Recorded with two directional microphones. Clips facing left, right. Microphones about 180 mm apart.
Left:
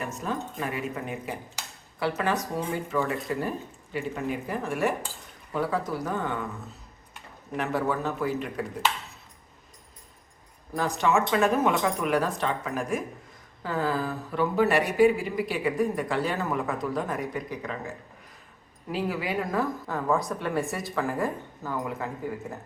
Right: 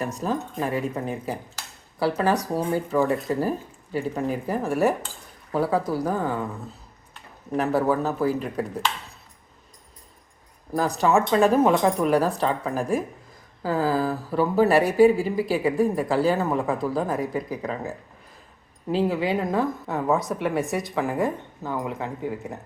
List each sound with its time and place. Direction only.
0.0 s speech: 35° right (ahead or behind)
7.5 s speech: 35° right (ahead or behind)
10.8 s speech: 35° right (ahead or behind); by 22.5 s 20° right (ahead or behind)